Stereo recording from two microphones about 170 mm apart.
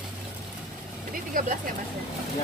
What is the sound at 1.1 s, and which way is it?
Vehicle, 55° right (ahead or behind).